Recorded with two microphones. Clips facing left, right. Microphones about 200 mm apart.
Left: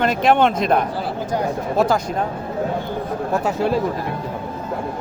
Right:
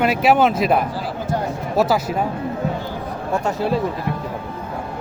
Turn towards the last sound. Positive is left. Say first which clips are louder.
# left 1 dB
turn(degrees=0)  # may be behind; listen again after turning